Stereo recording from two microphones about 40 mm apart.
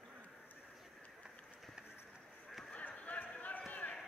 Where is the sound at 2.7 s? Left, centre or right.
Left.